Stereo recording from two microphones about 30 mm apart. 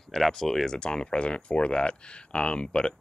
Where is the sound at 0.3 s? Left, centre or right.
Centre.